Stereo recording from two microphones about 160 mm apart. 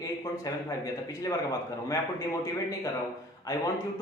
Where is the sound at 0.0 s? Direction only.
20° left (ahead or behind).